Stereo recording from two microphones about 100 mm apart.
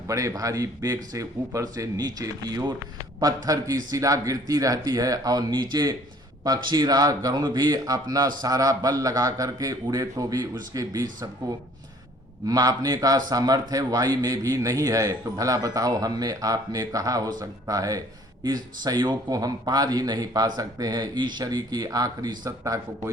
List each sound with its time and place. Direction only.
0.1 s a man's voice: 30° right (ahead or behind)